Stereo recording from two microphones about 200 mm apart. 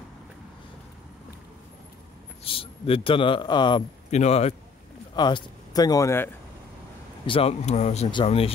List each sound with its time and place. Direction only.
2.4 s a man's voice: 25° left (ahead or behind)
4.1 s speech: 35° left (ahead or behind)
5.1 s speech: 20° left (ahead or behind)
7.2 s speech: 30° left (ahead or behind)